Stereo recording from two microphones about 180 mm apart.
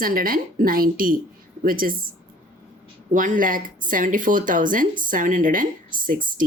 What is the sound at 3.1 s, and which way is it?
Speech, 45° right (ahead or behind).